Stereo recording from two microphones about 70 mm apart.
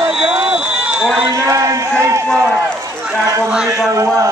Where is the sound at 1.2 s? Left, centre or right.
Right.